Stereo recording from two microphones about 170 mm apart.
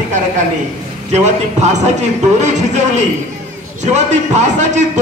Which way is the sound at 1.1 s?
40° right (ahead or behind).